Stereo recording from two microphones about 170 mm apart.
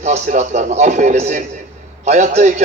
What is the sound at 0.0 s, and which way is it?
A man's voice, 45° right (ahead or behind).